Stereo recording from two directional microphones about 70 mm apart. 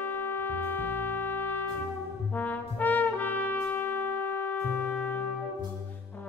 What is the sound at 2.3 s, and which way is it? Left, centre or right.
Trumpet, left.